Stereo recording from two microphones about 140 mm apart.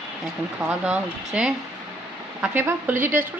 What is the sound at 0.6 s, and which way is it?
A woman's voice, 5° right (ahead or behind).